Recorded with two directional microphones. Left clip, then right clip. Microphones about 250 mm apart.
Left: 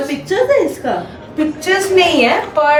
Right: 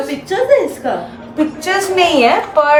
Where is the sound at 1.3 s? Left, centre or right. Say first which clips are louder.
Even; right.